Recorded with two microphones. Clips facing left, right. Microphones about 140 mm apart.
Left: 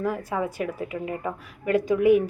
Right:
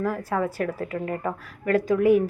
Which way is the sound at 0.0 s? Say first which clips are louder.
Right 1 dB; 20° left (ahead or behind).